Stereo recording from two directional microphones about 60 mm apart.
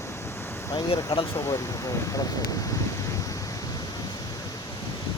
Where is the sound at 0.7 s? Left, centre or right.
Left.